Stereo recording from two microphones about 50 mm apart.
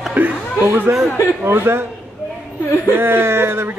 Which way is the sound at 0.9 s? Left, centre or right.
Right.